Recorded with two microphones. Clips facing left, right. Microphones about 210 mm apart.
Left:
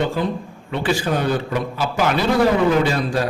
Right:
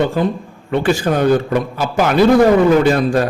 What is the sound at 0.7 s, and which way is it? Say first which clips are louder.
Speech: right 5 dB; 45° right (ahead or behind).